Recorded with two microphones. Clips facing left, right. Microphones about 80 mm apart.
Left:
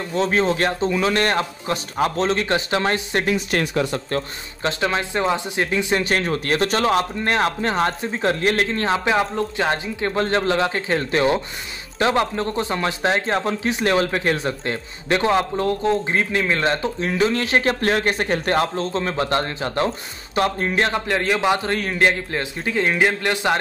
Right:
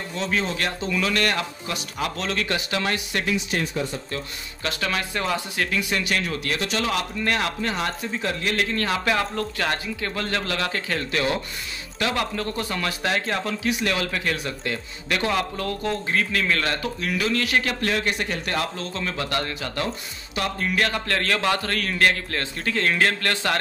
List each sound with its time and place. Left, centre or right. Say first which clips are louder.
0.1 s speech: left 7 dB; left
3.5 s speech: left 5 dB; left
4.6 s speech: left 5 dB; left